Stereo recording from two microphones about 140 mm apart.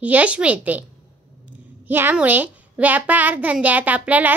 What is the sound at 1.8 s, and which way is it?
A woman's voice, 15° right (ahead or behind).